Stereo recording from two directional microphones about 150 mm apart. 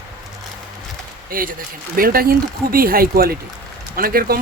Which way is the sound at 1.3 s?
70° right (ahead or behind).